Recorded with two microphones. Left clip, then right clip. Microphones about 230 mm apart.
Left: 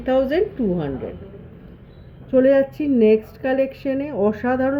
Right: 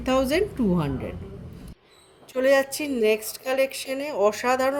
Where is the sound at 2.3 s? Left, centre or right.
Right.